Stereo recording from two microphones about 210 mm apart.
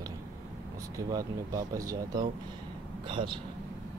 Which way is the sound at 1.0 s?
15° right (ahead or behind).